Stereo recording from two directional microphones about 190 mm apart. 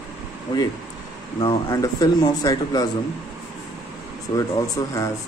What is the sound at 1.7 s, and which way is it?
A man's voice, 20° left (ahead or behind).